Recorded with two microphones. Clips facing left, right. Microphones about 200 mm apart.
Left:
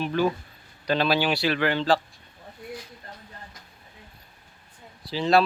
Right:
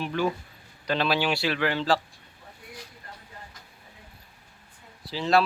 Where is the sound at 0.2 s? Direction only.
40° left (ahead or behind).